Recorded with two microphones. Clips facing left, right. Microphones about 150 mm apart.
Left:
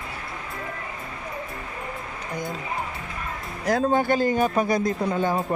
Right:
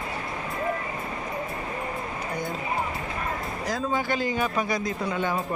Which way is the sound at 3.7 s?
60° left (ahead or behind).